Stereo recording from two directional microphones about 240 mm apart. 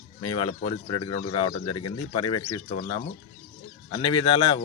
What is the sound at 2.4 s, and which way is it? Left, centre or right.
Speech, left.